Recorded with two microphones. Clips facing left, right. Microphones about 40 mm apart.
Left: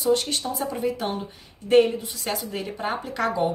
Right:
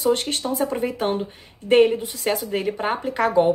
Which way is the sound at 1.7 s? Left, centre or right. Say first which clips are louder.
Right 2 dB; right.